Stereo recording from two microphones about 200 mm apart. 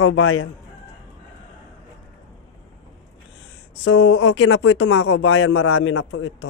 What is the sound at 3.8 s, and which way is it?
Speech, 90° left.